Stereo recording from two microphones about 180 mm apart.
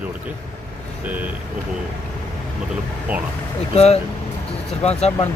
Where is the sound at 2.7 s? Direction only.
10° right (ahead or behind).